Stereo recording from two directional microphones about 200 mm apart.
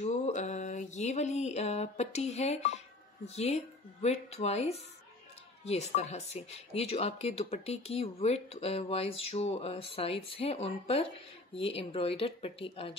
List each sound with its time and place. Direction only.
0.0 s mantra: 35° left (ahead or behind)
3.3 s speech: 35° left (ahead or behind)